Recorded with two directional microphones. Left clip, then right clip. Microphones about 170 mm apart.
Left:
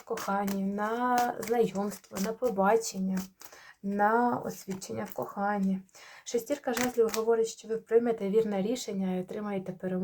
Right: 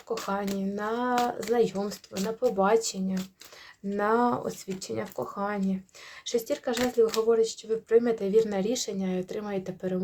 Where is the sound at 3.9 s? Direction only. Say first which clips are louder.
Right 1 dB; 35° right (ahead or behind).